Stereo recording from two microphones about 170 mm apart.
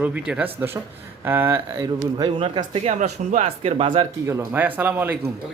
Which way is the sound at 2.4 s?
35° right (ahead or behind).